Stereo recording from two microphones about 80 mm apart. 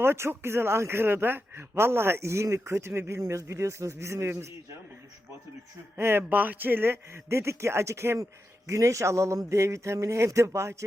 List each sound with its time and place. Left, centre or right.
0.0 s speech: right
6.0 s speech: right